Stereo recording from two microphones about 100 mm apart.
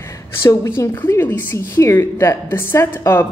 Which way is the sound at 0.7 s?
25° left (ahead or behind).